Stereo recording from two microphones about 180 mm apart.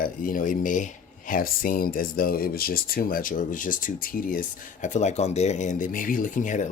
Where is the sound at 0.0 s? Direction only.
50° left (ahead or behind).